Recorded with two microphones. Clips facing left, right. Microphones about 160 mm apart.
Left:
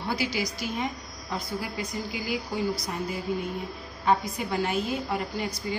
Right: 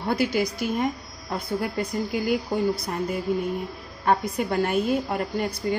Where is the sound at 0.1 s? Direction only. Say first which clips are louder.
Right 6 dB; 55° right (ahead or behind).